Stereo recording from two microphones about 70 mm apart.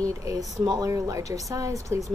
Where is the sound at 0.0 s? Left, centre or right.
Right.